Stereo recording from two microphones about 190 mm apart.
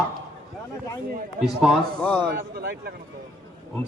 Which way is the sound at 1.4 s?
Centre (ahead or behind).